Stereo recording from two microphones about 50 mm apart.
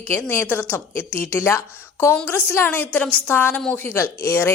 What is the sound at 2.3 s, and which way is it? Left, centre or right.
A woman's voice, left.